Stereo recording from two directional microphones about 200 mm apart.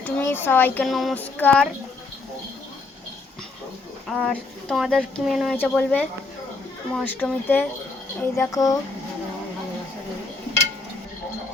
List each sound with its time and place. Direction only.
0.0 s speech: 10° left (ahead or behind)
4.1 s speech: centre (ahead or behind); by 8.8 s 15° left (ahead or behind)